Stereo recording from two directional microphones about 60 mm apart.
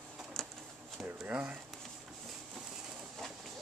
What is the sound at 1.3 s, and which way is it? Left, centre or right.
Speech, right.